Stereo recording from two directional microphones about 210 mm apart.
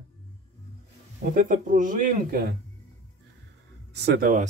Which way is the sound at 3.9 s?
50° right (ahead or behind).